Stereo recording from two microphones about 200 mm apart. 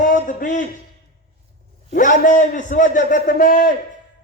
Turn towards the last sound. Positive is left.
turn(degrees=45)  # may be behind; listen again after turning